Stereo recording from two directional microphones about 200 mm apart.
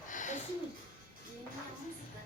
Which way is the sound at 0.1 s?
40° left (ahead or behind).